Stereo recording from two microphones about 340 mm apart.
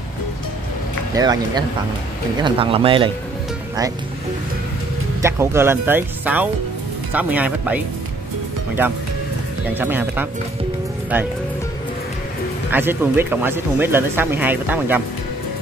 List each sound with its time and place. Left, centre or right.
1.1 s speech: centre
5.2 s speech: centre
9.8 s speech: centre
12.7 s speech: centre